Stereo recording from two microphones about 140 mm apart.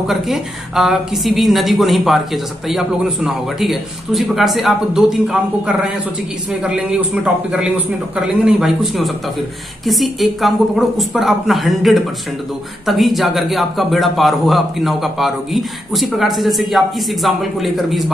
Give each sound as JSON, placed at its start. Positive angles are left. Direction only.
{"t": 0.0, "sound": "a man's voice", "side_deg": 0}